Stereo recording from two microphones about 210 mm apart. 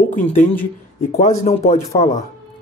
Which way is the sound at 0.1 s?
35° left (ahead or behind).